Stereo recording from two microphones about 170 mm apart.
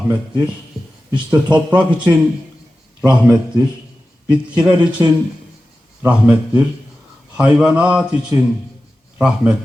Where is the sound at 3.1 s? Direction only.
5° right (ahead or behind).